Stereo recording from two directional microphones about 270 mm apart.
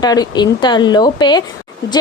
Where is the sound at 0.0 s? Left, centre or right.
Centre.